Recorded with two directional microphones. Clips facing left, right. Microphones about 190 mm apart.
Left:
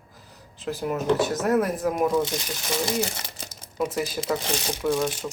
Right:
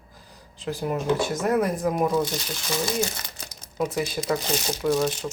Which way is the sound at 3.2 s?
25° left (ahead or behind).